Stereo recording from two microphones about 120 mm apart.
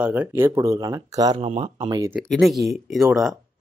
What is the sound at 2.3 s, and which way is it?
Speech, centre (ahead or behind).